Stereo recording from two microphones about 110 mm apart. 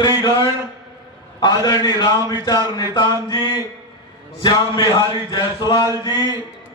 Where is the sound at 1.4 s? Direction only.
40° left (ahead or behind).